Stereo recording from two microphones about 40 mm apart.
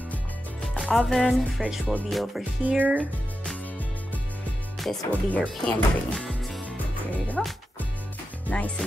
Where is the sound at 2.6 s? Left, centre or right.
Right.